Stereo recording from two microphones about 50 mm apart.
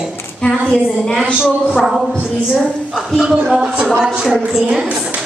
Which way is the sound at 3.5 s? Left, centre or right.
Centre.